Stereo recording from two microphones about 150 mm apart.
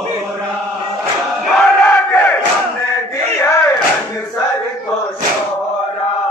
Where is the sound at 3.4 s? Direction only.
20° left (ahead or behind).